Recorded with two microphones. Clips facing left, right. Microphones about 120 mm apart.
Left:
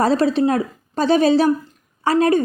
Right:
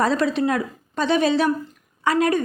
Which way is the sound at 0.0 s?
35° left (ahead or behind).